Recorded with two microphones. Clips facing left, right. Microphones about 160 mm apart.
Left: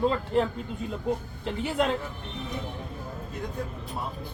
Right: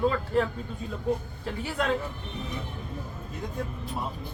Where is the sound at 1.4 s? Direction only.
20° left (ahead or behind).